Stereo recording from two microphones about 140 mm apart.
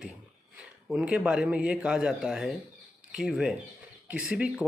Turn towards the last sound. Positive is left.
turn(degrees=-5)  # may be behind; listen again after turning